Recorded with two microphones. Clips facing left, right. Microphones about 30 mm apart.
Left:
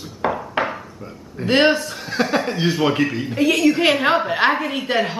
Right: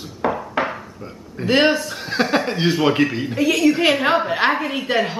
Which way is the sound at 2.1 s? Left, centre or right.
Centre.